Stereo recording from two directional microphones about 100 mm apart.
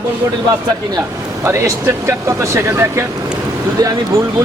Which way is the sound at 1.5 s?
25° right (ahead or behind).